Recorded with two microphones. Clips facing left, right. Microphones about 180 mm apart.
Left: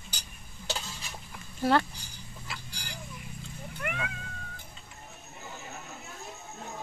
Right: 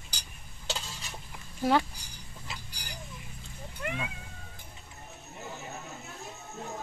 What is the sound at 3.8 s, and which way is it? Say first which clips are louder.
Cat: right 1 dB; 20° right (ahead or behind).